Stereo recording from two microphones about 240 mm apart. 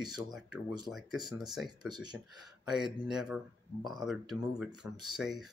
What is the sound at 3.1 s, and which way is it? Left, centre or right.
Speech, centre.